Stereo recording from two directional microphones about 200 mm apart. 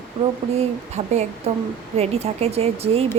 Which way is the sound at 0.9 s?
35° right (ahead or behind).